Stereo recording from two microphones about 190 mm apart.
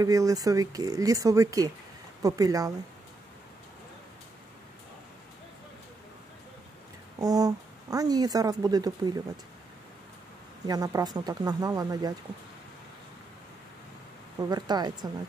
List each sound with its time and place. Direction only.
0.0 s speech: 20° right (ahead or behind)
7.2 s speech: 20° right (ahead or behind)
10.7 s speech: 20° right (ahead or behind)
14.5 s speech: 20° right (ahead or behind)